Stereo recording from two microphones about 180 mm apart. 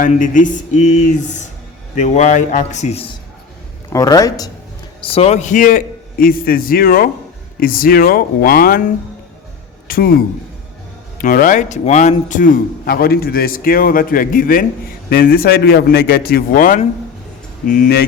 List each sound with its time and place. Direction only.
0.0 s a man's voice: 45° left (ahead or behind)
3.8 s speech: 20° left (ahead or behind)
4.9 s a man's voice: 30° left (ahead or behind); by 8.8 s 55° left (ahead or behind)
9.8 s speech: 55° left (ahead or behind)
11.2 s a man's voice: 50° left (ahead or behind)